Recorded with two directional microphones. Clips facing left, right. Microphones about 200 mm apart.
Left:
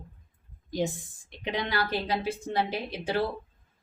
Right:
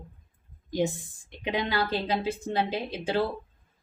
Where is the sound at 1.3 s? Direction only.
20° right (ahead or behind).